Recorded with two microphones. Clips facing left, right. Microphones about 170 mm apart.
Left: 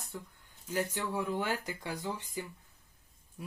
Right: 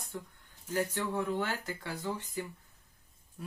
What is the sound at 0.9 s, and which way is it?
Speech, 10° left (ahead or behind).